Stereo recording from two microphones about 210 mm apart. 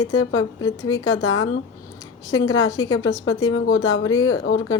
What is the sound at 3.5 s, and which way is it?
A woman's voice, 75° left (ahead or behind).